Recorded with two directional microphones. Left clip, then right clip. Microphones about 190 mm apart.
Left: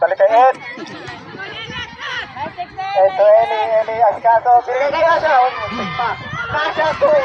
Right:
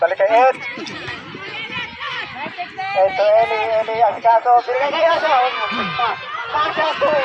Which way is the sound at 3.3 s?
45° right (ahead or behind).